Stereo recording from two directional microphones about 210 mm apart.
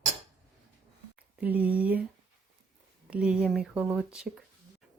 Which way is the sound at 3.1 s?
5° right (ahead or behind).